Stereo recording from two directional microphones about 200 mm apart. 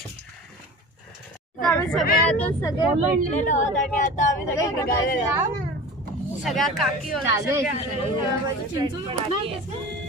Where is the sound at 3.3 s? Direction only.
40° left (ahead or behind).